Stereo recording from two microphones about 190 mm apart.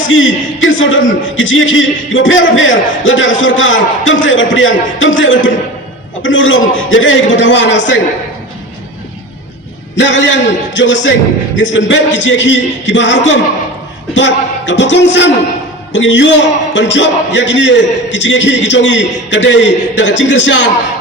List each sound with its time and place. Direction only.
0.0 s a man's voice: 90° left; by 8.0 s 75° left (ahead or behind)
10.0 s a man's voice: 75° left (ahead or behind)